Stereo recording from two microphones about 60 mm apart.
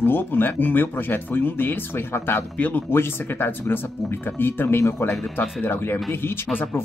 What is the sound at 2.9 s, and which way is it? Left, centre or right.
Speech, left.